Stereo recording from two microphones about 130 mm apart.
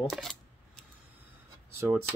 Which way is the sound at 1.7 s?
20° right (ahead or behind).